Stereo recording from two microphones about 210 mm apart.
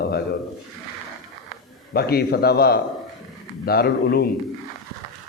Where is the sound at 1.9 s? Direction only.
50° left (ahead or behind).